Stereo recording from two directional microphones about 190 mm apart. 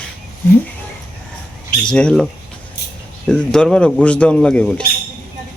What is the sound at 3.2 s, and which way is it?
Speech, 5° left (ahead or behind).